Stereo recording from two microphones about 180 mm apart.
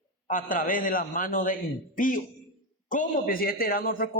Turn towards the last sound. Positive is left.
turn(degrees=55)  # may be behind; listen again after turning